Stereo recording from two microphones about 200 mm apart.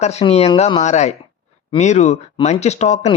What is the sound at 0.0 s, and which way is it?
Speech, 30° left (ahead or behind).